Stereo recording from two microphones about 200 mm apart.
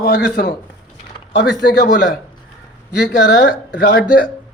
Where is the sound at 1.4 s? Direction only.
60° left (ahead or behind).